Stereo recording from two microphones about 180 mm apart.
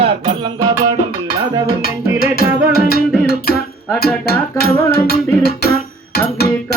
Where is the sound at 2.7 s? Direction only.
60° left (ahead or behind).